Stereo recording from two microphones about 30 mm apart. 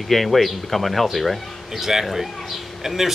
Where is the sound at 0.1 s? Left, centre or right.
Centre.